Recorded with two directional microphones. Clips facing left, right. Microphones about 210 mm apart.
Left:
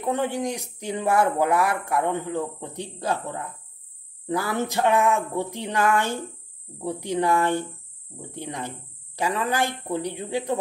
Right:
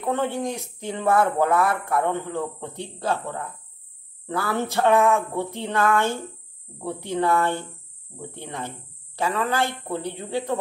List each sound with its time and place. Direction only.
0.0 s speech: 15° left (ahead or behind)